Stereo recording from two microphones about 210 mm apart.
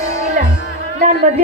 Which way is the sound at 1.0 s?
35° right (ahead or behind).